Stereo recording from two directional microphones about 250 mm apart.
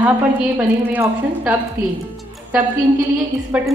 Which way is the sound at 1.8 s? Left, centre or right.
Centre.